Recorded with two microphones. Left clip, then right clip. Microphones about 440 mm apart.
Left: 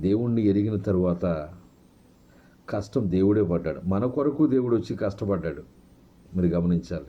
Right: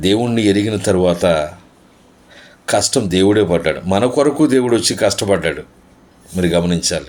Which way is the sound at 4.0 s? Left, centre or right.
Left.